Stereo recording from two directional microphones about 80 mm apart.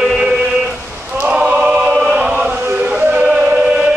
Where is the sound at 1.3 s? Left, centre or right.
Centre.